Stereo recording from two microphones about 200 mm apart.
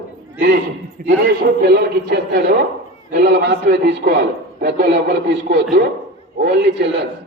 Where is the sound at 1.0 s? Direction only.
45° right (ahead or behind).